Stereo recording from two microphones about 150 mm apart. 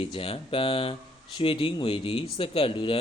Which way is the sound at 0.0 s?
35° left (ahead or behind).